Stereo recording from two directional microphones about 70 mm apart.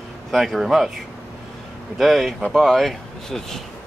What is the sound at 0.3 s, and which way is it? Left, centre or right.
Speech, centre.